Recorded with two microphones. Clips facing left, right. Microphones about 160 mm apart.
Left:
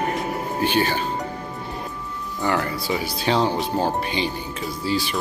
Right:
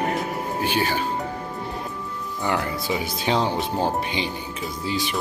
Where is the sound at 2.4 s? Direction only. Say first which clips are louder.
Left 2 dB; 15° right (ahead or behind).